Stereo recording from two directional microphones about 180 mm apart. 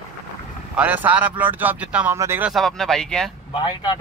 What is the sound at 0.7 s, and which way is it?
Speech, 10° right (ahead or behind).